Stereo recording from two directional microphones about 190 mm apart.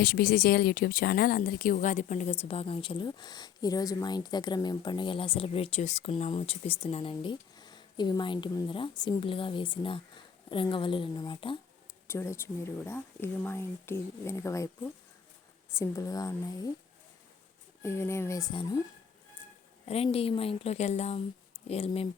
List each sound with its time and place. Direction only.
0.0 s speech: 50° left (ahead or behind); by 11.5 s 25° left (ahead or behind)
12.0 s speech: 15° left (ahead or behind)
15.8 s speech: 15° left (ahead or behind)
17.8 s speech: 15° left (ahead or behind)
19.8 s a woman's voice: 30° left (ahead or behind)